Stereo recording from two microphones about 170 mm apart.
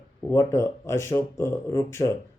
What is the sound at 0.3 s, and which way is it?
Speech, 15° left (ahead or behind).